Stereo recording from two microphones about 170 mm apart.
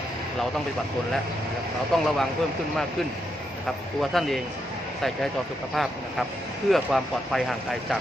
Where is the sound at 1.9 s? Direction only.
Centre (ahead or behind).